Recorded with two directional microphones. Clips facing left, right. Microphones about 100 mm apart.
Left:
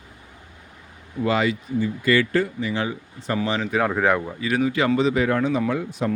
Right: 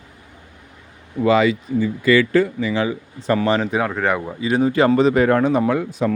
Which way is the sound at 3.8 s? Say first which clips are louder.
Even; centre (ahead or behind).